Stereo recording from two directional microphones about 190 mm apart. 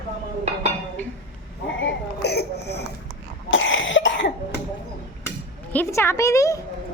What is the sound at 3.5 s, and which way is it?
Cough, 85° left.